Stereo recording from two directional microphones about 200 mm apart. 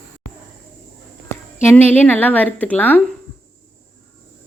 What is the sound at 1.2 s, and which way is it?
Speech, 10° left (ahead or behind).